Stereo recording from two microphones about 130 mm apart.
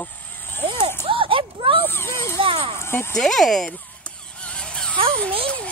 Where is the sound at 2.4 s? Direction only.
45° right (ahead or behind).